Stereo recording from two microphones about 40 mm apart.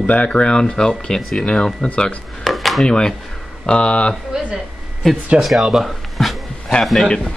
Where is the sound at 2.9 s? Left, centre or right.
Centre.